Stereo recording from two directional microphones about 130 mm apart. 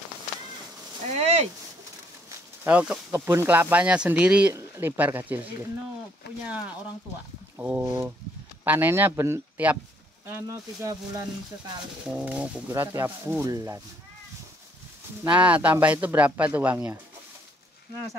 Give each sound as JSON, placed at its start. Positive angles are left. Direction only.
{"t": 1.1, "sound": "speech", "side_deg": -60}
{"t": 2.6, "sound": "speech", "side_deg": -10}
{"t": 12.0, "sound": "speech", "side_deg": -10}
{"t": 15.2, "sound": "speech", "side_deg": -10}